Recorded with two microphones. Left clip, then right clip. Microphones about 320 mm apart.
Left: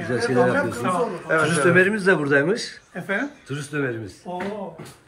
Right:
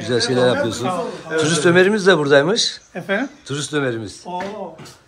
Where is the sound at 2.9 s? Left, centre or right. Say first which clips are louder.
Right 3 dB; right.